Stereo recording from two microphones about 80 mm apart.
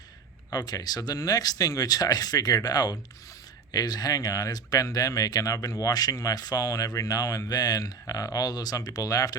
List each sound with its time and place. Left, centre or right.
0.5 s speech: left